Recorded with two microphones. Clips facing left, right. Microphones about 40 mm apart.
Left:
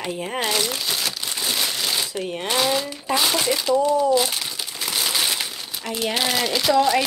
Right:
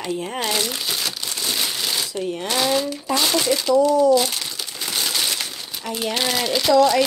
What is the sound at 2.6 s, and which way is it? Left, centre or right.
Speech, centre.